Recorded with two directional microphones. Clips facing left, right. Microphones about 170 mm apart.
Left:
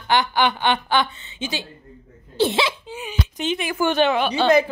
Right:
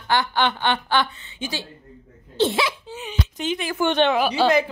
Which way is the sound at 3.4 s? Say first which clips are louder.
Left 2 dB; 20° left (ahead or behind).